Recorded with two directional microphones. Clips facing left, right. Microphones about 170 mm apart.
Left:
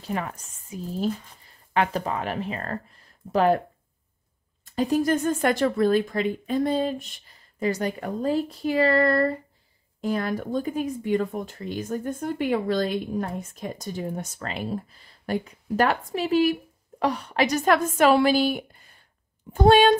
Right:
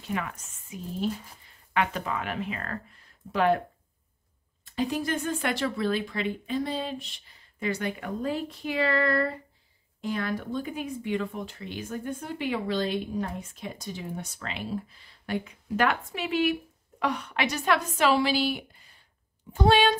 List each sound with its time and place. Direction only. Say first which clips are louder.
0.0 s speech: left 3 dB; 35° left (ahead or behind)
4.7 s speech: left 6 dB; 45° left (ahead or behind)